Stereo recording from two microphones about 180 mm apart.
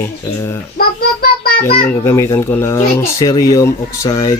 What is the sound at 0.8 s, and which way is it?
Child singing, 55° left (ahead or behind).